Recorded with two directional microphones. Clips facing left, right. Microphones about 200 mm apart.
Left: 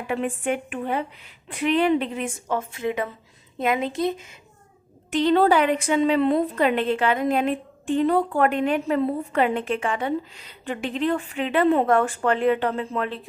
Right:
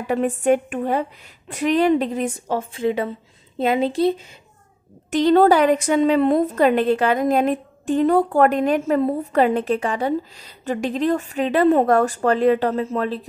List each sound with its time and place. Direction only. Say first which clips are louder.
0.0 s a woman's voice: right 6 dB; 40° right (ahead or behind)
5.1 s a woman's voice: right 4 dB; 40° right (ahead or behind)